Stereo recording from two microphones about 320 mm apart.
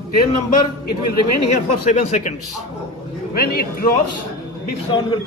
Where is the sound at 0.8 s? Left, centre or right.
Left.